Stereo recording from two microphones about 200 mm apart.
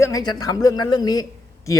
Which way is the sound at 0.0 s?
20° left (ahead or behind).